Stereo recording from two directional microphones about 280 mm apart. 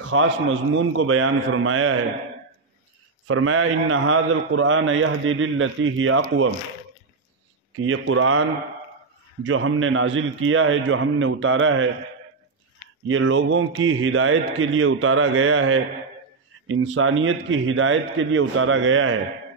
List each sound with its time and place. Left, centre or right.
0.0 s a man's voice: right
3.3 s a man's voice: right
7.8 s a man's voice: right
13.0 s a man's voice: right